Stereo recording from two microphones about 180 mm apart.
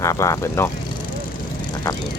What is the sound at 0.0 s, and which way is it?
Speech, 15° left (ahead or behind).